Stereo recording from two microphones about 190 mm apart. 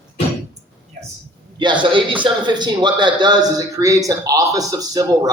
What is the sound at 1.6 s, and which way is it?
A man's voice, 25° right (ahead or behind).